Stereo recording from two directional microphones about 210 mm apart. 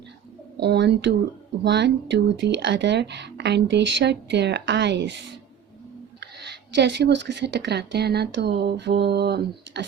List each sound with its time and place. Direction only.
0.5 s a woman's voice: 55° right (ahead or behind)
6.1 s a woman's voice: 55° right (ahead or behind)